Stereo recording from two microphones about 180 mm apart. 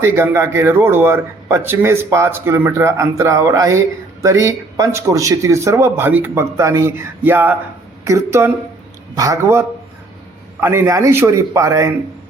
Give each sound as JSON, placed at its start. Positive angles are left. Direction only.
{"t": 0.0, "sound": "speech", "side_deg": -15}